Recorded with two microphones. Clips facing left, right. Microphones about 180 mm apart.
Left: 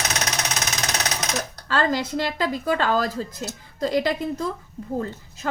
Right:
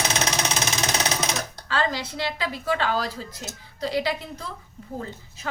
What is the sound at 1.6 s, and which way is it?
A woman's voice, 45° left (ahead or behind).